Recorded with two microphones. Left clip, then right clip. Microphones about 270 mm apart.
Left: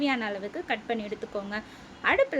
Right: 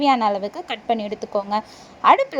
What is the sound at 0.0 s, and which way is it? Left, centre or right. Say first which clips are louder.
A woman's voice: right 11 dB; right.